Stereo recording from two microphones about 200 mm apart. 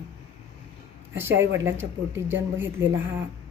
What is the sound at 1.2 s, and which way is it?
Speech, 10° right (ahead or behind).